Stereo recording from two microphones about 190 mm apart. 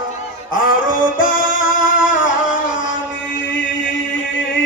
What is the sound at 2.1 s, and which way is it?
Music, 85° left.